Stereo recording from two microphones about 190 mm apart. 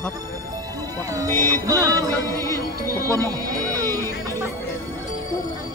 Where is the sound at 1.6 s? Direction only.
15° right (ahead or behind).